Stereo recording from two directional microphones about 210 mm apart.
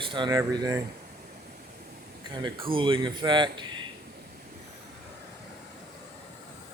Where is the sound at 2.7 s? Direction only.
25° right (ahead or behind).